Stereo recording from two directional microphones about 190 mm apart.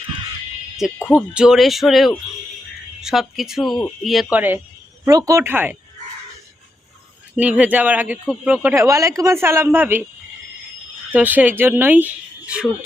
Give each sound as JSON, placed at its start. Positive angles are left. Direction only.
{"t": 1.1, "sound": "speech", "side_deg": -5}
{"t": 7.3, "sound": "speech", "side_deg": -5}
{"t": 11.1, "sound": "speech", "side_deg": -10}